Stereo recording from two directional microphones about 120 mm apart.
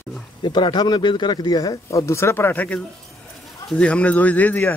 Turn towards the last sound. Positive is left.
turn(degrees=10)  # may be behind; listen again after turning